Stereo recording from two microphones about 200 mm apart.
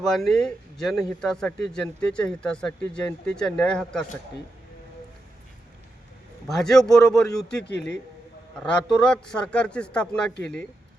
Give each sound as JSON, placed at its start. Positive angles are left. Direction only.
{"t": 0.0, "sound": "speech", "side_deg": 0}
{"t": 6.5, "sound": "speech", "side_deg": 0}
{"t": 7.6, "sound": "speech", "side_deg": 60}
{"t": 8.6, "sound": "speech", "side_deg": 5}